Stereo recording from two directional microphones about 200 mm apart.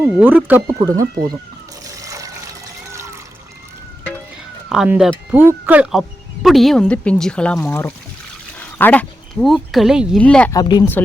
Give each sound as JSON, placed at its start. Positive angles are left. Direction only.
{"t": 0.0, "sound": "speech", "side_deg": -5}
{"t": 2.0, "sound": "water", "side_deg": -15}
{"t": 4.7, "sound": "speech", "side_deg": -5}
{"t": 10.5, "sound": "speech", "side_deg": 20}